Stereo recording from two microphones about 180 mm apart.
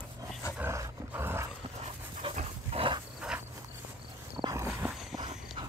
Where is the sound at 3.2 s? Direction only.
5° right (ahead or behind).